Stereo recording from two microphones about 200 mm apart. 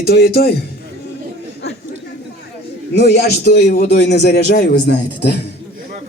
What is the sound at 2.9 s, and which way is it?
A man's voice, 55° left (ahead or behind).